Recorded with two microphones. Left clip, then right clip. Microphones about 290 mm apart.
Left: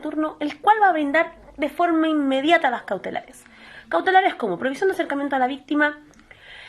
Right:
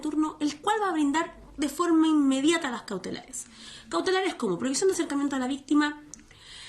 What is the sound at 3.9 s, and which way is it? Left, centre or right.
Speech, centre.